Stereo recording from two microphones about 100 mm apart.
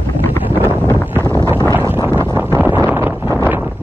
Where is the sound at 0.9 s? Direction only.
25° right (ahead or behind).